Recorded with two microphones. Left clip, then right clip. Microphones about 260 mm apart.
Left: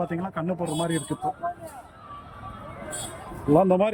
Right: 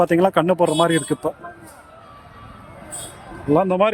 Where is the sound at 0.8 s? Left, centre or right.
Right.